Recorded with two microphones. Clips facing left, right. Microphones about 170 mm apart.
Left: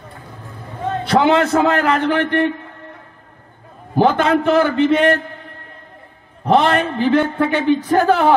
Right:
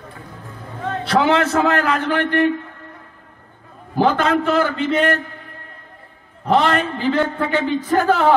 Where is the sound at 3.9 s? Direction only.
20° left (ahead or behind).